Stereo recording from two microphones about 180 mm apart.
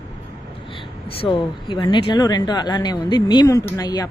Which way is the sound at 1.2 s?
30° left (ahead or behind).